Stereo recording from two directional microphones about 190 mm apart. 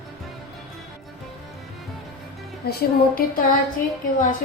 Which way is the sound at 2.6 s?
55° left (ahead or behind).